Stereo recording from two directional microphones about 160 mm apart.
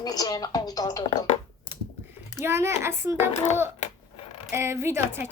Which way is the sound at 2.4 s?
15° right (ahead or behind).